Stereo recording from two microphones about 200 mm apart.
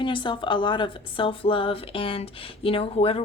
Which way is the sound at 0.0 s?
25° left (ahead or behind).